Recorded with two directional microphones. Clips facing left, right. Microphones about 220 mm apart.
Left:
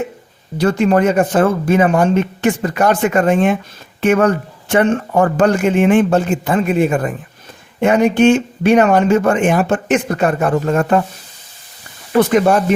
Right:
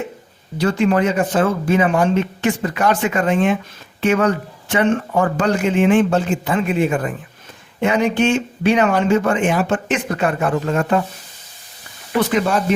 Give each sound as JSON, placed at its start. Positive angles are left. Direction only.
{"t": 0.6, "sound": "speech", "side_deg": 45}
{"t": 12.3, "sound": "speech", "side_deg": 50}